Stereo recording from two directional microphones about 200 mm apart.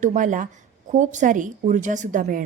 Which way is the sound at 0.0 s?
40° right (ahead or behind).